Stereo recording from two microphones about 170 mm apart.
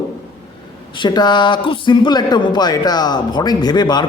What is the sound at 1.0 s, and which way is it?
Speech, 25° left (ahead or behind).